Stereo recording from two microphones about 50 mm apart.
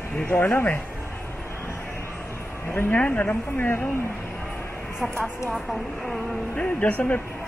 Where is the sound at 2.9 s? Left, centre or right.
Left.